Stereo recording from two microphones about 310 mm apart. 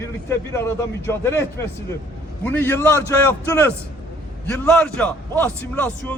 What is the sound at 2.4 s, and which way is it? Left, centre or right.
Speech, centre.